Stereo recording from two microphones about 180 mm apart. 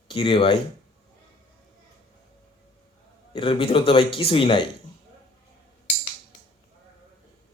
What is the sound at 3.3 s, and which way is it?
A man's voice, 30° left (ahead or behind).